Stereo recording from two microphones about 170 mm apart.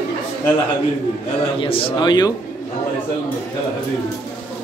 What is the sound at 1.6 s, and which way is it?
Speech, 30° left (ahead or behind).